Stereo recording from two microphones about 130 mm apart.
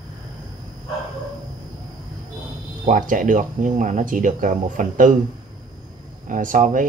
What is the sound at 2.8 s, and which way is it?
Speech, 90° right.